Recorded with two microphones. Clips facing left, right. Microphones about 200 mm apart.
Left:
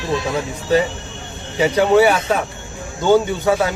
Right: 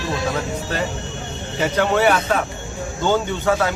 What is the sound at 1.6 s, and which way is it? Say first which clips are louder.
Speech: left 5 dB; 10° left (ahead or behind).